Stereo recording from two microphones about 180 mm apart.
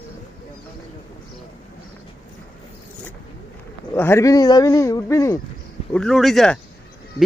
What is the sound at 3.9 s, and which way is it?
Speech, 15° left (ahead or behind).